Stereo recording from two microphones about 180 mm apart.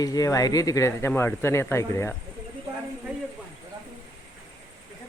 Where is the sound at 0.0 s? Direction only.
20° left (ahead or behind).